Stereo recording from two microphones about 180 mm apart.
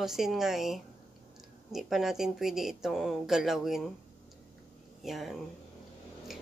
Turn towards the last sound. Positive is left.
turn(degrees=0)  # may be behind; listen again after turning